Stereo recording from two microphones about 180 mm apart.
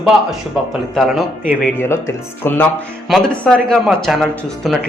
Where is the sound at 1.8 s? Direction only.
15° left (ahead or behind).